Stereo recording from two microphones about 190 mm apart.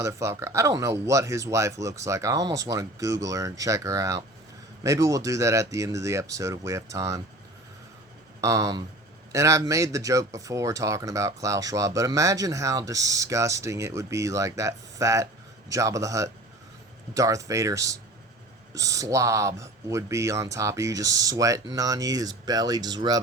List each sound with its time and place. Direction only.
0.0 s speech: 15° right (ahead or behind)
8.4 s speech: 15° right (ahead or behind)